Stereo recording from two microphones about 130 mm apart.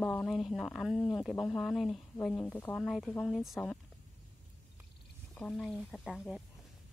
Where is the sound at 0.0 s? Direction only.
10° left (ahead or behind).